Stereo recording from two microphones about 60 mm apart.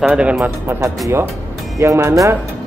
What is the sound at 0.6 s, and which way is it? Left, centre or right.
Speech, right.